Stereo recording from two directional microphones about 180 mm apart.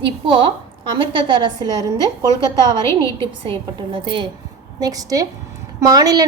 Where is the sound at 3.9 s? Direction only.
25° right (ahead or behind).